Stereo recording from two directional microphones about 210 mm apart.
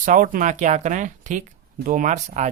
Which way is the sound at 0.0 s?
40° right (ahead or behind).